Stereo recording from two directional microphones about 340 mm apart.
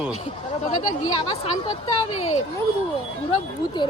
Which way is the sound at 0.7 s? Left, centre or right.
Left.